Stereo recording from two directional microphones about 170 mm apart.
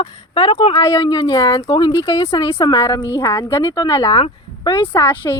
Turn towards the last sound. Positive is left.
turn(degrees=20)  # may be behind; listen again after turning